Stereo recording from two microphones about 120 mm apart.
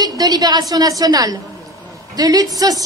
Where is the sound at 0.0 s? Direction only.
35° right (ahead or behind).